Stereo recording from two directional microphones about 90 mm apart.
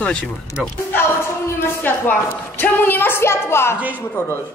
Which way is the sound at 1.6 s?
25° left (ahead or behind).